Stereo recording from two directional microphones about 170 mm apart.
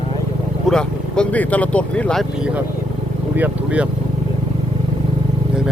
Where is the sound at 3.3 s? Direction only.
10° right (ahead or behind).